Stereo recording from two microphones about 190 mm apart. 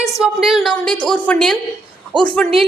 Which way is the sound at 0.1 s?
Centre (ahead or behind).